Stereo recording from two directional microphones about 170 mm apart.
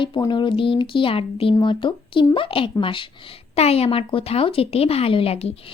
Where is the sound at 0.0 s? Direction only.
25° left (ahead or behind).